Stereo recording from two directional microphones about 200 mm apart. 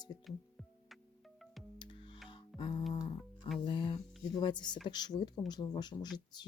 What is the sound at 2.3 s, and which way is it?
Music, 25° left (ahead or behind).